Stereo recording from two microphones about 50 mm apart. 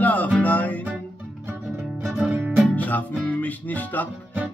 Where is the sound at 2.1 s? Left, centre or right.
Right.